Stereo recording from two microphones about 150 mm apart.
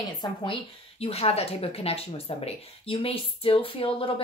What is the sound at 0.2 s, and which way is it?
Speech, 30° left (ahead or behind).